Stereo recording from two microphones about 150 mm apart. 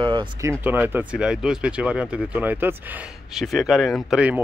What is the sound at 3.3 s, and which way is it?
Speech, centre (ahead or behind).